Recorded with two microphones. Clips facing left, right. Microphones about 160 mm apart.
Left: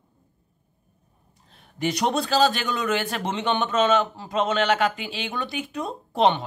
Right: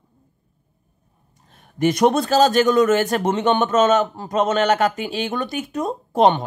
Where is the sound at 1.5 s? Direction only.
50° right (ahead or behind).